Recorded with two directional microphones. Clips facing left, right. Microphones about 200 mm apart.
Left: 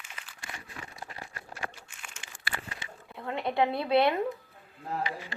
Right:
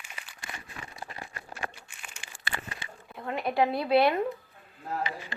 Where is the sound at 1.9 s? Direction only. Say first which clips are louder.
Even; 10° right (ahead or behind).